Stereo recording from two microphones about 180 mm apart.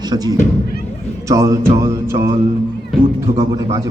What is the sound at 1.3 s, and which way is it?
Music, 15° right (ahead or behind).